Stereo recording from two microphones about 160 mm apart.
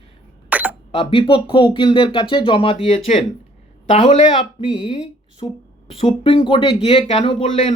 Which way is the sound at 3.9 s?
45° left (ahead or behind).